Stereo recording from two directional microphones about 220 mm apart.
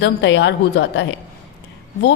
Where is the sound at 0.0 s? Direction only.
55° left (ahead or behind).